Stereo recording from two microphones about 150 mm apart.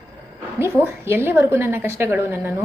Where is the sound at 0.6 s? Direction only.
15° right (ahead or behind).